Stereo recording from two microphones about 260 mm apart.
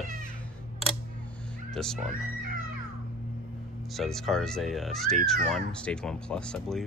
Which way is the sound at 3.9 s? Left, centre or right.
Centre.